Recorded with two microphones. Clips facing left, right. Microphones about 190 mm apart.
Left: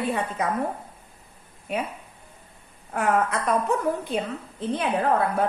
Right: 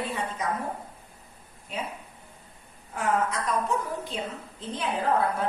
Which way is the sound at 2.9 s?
60° left (ahead or behind).